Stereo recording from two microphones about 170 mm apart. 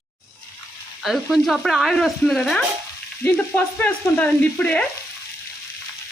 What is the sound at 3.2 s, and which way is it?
Frying, 10° left (ahead or behind).